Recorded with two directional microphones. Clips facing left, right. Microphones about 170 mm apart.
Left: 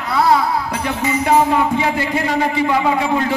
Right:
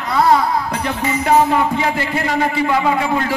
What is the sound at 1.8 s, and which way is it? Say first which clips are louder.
A man's voice: left 1 dB; 15° left (ahead or behind).